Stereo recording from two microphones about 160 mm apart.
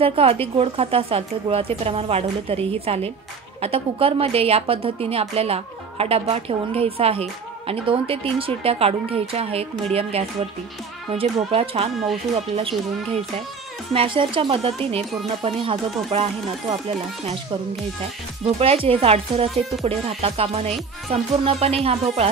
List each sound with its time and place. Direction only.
0.0 s a woman's voice: 35° right (ahead or behind)
18.6 s a woman's voice: 35° right (ahead or behind)